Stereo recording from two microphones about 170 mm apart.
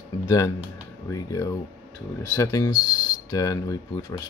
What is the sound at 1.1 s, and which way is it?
Speech, 20° left (ahead or behind).